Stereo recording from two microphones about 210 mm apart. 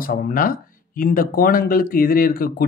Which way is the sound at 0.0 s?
40° left (ahead or behind).